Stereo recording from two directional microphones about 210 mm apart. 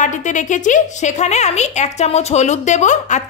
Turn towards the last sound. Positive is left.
turn(degrees=35)  # may be behind; listen again after turning